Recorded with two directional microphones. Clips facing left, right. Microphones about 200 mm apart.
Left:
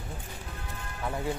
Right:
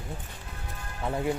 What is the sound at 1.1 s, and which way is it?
Speech, 25° right (ahead or behind).